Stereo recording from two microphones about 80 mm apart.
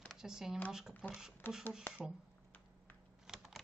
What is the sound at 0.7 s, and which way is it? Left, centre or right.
Speech, centre.